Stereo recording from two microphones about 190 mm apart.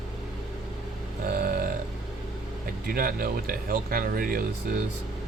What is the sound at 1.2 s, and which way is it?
Burping, 50° right (ahead or behind).